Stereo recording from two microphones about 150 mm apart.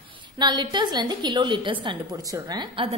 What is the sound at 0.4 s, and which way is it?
A woman's voice, 30° right (ahead or behind).